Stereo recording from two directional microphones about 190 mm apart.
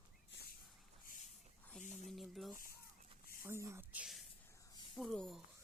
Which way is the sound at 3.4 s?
15° right (ahead or behind).